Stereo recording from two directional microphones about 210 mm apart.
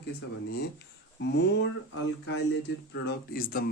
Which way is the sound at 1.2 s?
55° left (ahead or behind).